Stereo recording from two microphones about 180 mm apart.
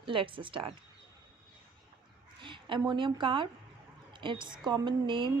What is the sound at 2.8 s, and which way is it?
A woman's voice, 25° right (ahead or behind).